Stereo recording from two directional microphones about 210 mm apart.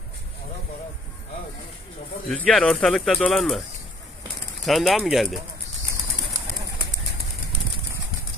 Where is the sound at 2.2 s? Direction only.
5° left (ahead or behind).